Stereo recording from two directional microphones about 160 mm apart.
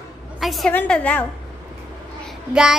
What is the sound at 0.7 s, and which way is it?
Speech, 10° left (ahead or behind).